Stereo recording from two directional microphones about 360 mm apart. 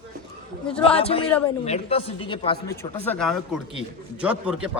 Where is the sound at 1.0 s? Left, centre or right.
Centre.